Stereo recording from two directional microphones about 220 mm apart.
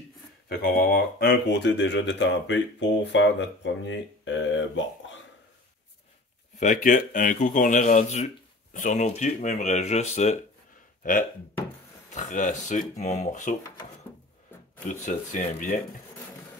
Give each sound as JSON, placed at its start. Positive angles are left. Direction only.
{"t": 0.5, "sound": "speech", "side_deg": 40}
{"t": 6.6, "sound": "speech", "side_deg": 35}
{"t": 14.9, "sound": "speech", "side_deg": 35}